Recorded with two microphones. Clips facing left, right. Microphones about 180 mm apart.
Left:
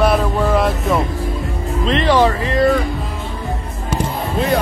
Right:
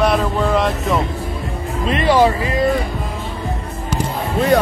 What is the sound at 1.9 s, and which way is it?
Music, 10° right (ahead or behind).